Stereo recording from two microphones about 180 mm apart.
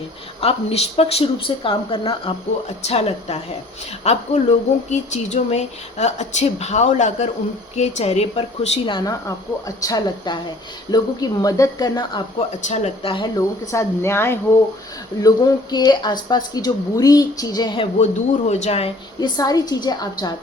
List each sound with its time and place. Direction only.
0.3 s speech: 35° left (ahead or behind)
9.0 s speech: 20° left (ahead or behind)
12.6 s speech: 40° left (ahead or behind)
13.7 s speech: 15° left (ahead or behind)
18.0 s speech: 40° left (ahead or behind)
19.4 s speech: 20° left (ahead or behind)